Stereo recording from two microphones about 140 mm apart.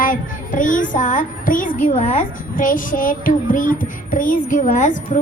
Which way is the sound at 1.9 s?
50° left (ahead or behind).